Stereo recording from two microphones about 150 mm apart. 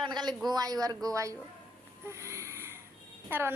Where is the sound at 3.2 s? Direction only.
15° right (ahead or behind).